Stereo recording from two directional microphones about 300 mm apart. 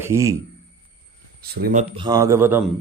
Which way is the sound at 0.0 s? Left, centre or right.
Centre.